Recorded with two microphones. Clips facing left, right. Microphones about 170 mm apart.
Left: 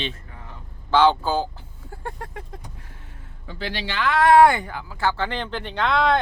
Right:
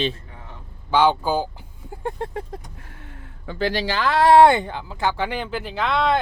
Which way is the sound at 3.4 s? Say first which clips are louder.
Right 7 dB; 50° right (ahead or behind).